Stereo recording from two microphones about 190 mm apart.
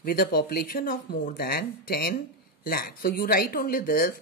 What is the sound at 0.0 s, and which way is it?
Speech, 50° left (ahead or behind).